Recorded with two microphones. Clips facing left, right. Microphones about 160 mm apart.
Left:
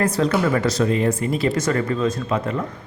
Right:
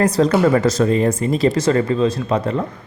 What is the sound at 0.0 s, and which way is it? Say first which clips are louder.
Speech: right 5 dB; 35° right (ahead or behind).